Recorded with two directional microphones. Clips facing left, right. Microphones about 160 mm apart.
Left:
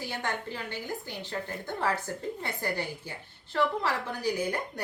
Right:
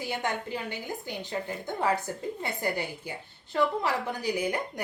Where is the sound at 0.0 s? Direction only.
15° right (ahead or behind).